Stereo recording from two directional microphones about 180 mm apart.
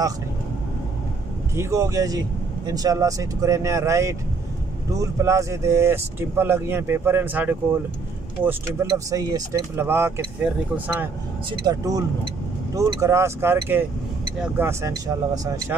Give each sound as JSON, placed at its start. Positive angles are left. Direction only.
{"t": 1.5, "sound": "speech", "side_deg": -15}
{"t": 11.6, "sound": "speech", "side_deg": -20}